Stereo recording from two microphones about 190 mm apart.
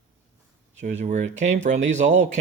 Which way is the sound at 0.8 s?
40° right (ahead or behind).